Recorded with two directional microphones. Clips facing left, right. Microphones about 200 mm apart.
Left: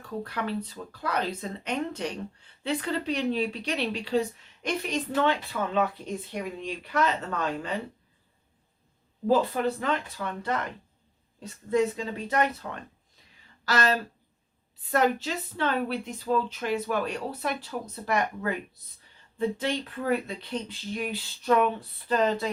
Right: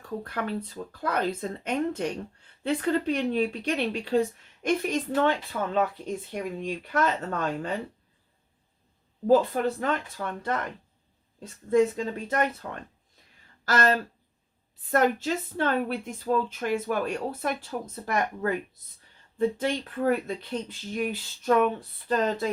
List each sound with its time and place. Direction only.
0.3 s speech: 50° right (ahead or behind)
9.3 s speech: 45° right (ahead or behind)
13.7 s speech: 50° right (ahead or behind)